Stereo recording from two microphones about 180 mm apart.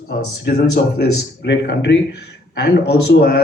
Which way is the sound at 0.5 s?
70° left (ahead or behind).